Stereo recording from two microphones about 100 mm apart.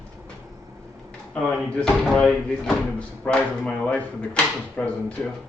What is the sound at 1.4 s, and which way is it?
Speech, 5° left (ahead or behind).